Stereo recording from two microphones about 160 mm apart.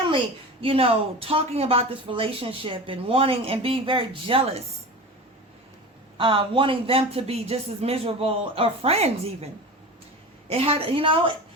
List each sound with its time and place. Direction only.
0.6 s speech: 35° right (ahead or behind)
6.1 s speech: 35° right (ahead or behind)
10.5 s speech: 40° right (ahead or behind)